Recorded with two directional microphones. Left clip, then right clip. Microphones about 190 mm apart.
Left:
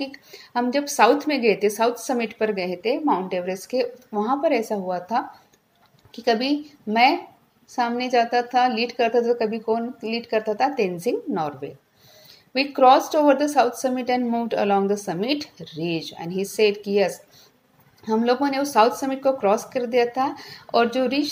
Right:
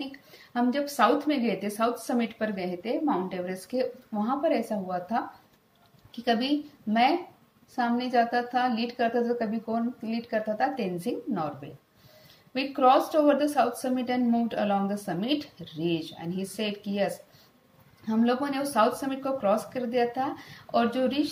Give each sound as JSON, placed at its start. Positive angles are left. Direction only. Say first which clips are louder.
{"t": 0.5, "sound": "a woman's voice", "louder": "left 5 dB", "side_deg": 20}